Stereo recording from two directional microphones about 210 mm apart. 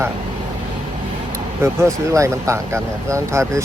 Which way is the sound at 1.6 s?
15° right (ahead or behind).